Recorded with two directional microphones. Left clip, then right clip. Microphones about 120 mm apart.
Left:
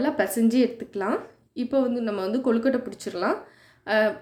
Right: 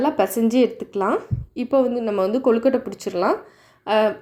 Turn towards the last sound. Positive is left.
turn(degrees=-25)  # may be behind; listen again after turning